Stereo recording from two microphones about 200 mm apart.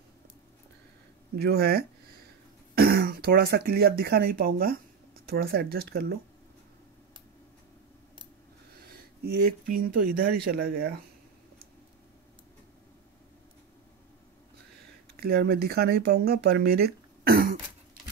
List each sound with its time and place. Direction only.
1.4 s speech: 50° right (ahead or behind)
8.8 s speech: 50° right (ahead or behind)
15.1 s speech: 50° right (ahead or behind)